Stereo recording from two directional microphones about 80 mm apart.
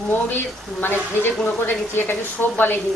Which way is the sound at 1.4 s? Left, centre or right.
Left.